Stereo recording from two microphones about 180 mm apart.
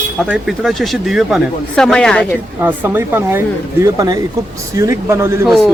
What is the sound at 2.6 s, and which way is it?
Speech, 10° right (ahead or behind).